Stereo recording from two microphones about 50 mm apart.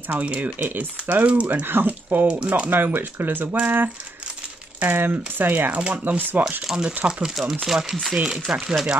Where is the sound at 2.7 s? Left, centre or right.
Right.